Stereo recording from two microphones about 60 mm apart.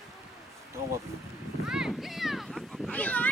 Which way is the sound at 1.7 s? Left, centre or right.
Centre.